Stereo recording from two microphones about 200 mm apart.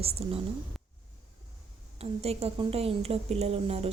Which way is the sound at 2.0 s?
30° right (ahead or behind).